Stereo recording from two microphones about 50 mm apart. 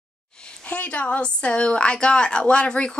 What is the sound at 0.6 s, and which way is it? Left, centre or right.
A woman's voice, left.